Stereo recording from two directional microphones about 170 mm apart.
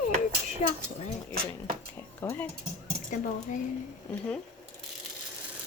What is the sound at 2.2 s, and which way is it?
Speech, 10° left (ahead or behind).